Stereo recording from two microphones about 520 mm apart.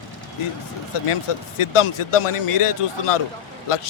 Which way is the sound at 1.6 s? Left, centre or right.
Left.